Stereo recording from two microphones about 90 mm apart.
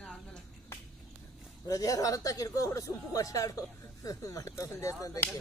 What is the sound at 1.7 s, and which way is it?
Speech, 40° left (ahead or behind).